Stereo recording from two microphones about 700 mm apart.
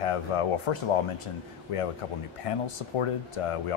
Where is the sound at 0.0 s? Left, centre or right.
Left.